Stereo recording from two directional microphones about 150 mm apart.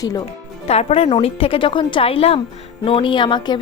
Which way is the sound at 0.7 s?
45° left (ahead or behind).